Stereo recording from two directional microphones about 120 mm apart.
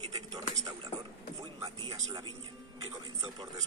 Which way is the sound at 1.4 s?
35° right (ahead or behind).